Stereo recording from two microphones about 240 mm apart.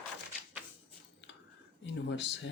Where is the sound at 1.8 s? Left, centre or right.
Left.